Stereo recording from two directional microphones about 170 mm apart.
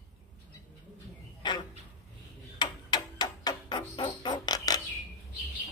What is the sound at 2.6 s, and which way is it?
Music, 25° left (ahead or behind).